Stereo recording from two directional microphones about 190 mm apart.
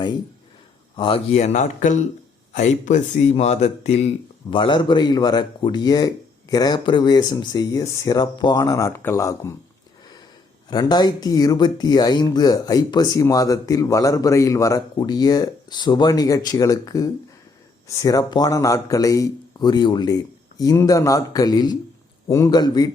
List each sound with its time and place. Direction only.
0.9 s speech: 25° left (ahead or behind)
10.7 s speech: 20° left (ahead or behind)